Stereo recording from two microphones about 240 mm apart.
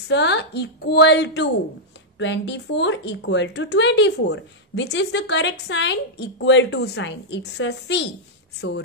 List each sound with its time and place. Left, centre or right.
0.1 s speech: left